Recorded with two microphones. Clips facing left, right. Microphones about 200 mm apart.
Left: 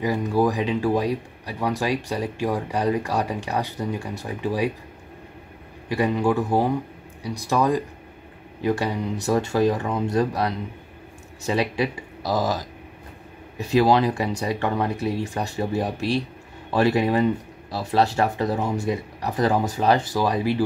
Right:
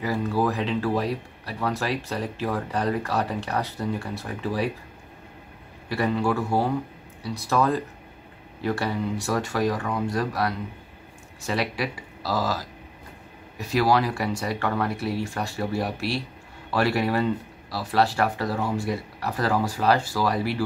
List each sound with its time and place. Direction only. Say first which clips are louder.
0.0 s speech: left 3 dB; 15° left (ahead or behind)
5.9 s speech: left 3 dB; 15° left (ahead or behind)